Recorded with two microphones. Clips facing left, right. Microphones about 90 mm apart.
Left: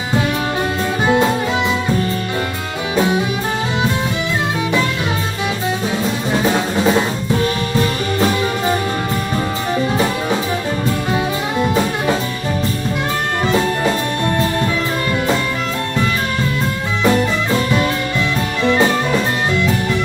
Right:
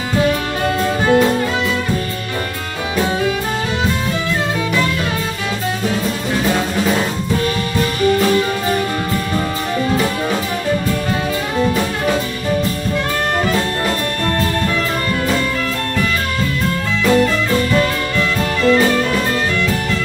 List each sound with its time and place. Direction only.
1.0 s music: 20° left (ahead or behind)
3.0 s music: 20° left (ahead or behind)
17.0 s music: 20° left (ahead or behind)